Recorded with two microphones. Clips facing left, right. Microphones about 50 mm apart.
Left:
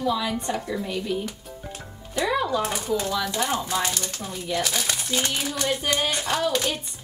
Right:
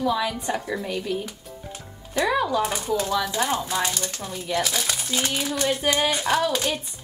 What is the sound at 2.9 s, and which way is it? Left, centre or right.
Speech, centre.